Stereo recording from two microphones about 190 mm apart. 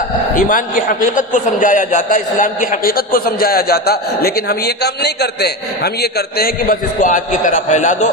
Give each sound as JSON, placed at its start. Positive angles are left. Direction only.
{"t": 0.4, "sound": "a man's voice", "side_deg": 45}